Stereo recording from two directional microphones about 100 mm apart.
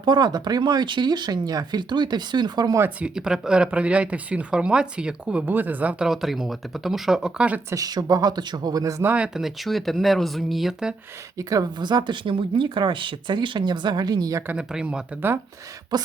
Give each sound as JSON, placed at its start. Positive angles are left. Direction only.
{"t": 0.0, "sound": "speech", "side_deg": -45}
{"t": 3.0, "sound": "speech", "side_deg": -5}
{"t": 6.1, "sound": "speech", "side_deg": 0}
{"t": 7.7, "sound": "speech", "side_deg": -40}
{"t": 9.0, "sound": "speech", "side_deg": -10}
{"t": 11.3, "sound": "speech", "side_deg": -40}
{"t": 14.4, "sound": "speech", "side_deg": -10}
{"t": 15.9, "sound": "speech", "side_deg": -45}